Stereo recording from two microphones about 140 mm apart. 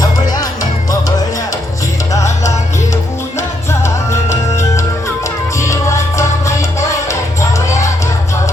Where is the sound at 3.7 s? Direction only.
20° left (ahead or behind).